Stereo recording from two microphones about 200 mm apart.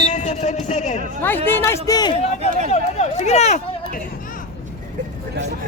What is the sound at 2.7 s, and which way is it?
Speech, 35° left (ahead or behind).